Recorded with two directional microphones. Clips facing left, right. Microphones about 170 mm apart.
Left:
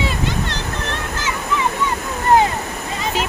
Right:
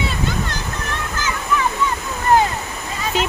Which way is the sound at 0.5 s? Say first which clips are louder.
Left 2 dB; 25° left (ahead or behind).